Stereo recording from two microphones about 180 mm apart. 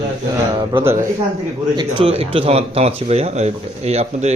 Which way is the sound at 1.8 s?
30° right (ahead or behind).